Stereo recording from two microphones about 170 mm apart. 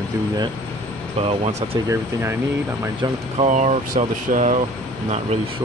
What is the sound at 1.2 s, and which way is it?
Speech, 35° right (ahead or behind).